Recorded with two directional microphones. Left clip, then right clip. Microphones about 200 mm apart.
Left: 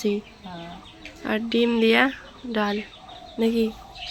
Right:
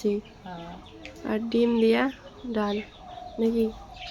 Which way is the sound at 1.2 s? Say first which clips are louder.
Left 2 dB; centre (ahead or behind).